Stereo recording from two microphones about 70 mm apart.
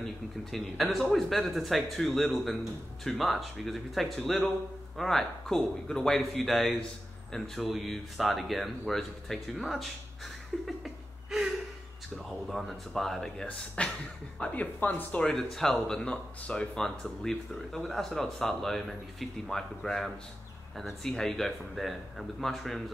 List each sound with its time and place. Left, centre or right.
0.0 s speech: centre
10.8 s chuckle: centre
12.3 s speech: centre
13.5 s speech: centre
15.5 s speech: centre